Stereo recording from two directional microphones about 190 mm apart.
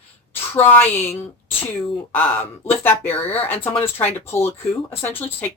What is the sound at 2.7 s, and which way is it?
Speech, 10° left (ahead or behind).